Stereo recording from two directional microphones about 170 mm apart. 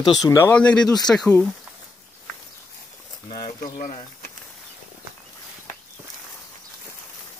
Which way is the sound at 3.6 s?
50° left (ahead or behind).